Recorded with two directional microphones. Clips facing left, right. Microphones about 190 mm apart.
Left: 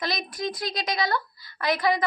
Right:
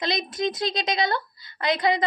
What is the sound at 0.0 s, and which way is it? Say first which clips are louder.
A woman's voice: right 4 dB; 20° right (ahead or behind).